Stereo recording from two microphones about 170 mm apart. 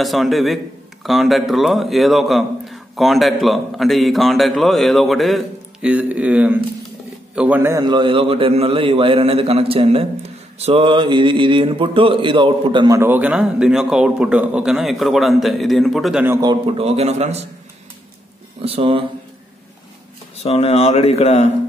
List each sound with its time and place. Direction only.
0.0 s a man's voice: centre (ahead or behind)
7.8 s a man's voice: 25° right (ahead or behind); by 16.3 s 5° right (ahead or behind)
16.3 s a man's voice: 30° right (ahead or behind)
18.6 s speech: 35° right (ahead or behind)
20.4 s speech: 35° left (ahead or behind)